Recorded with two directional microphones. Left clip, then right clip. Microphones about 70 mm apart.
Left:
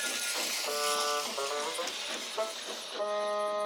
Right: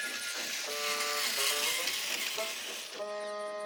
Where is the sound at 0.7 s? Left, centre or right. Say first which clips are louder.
Left 2 dB; left.